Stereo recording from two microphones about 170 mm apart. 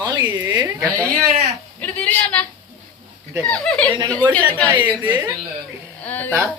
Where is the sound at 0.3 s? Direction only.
20° right (ahead or behind).